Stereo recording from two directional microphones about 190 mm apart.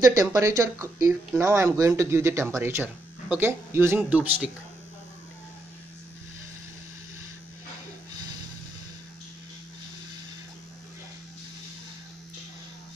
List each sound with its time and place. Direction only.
0.0 s speech: 15° right (ahead or behind)